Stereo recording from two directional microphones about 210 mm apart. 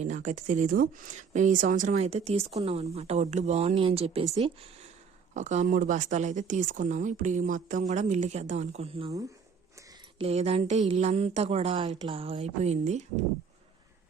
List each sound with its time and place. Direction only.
0.0 s a woman's voice: 35° right (ahead or behind)
10.2 s a woman's voice: 30° right (ahead or behind)